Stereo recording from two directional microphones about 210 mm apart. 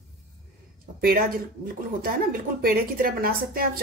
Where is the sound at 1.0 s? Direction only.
45° right (ahead or behind).